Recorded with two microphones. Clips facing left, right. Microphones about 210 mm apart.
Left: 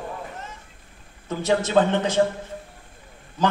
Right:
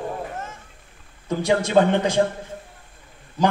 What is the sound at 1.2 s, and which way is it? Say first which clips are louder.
Speech: right 2 dB; 15° right (ahead or behind).